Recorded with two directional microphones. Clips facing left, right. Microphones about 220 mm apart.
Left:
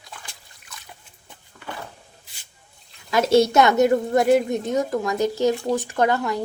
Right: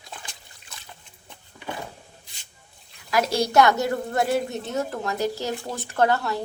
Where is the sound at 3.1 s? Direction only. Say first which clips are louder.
Left 6 dB; 25° left (ahead or behind).